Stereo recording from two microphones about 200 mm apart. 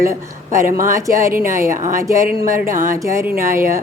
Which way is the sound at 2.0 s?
15° right (ahead or behind).